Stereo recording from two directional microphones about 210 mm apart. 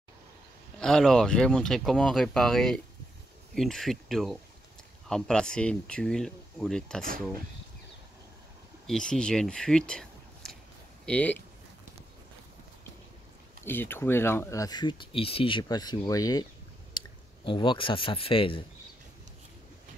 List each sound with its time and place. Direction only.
0.7 s speech: 5° left (ahead or behind)
8.8 s speech: 5° left (ahead or behind)
13.7 s speech: 10° left (ahead or behind)
17.0 s clicking: 20° left (ahead or behind)
17.5 s speech: 25° left (ahead or behind)